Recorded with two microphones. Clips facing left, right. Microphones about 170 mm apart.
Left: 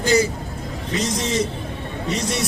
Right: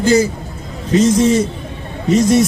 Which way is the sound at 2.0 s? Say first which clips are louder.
Right 13 dB; 45° right (ahead or behind).